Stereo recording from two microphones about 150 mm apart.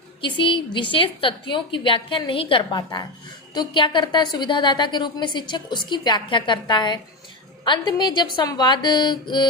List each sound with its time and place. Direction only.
0.2 s a woman's voice: 35° left (ahead or behind)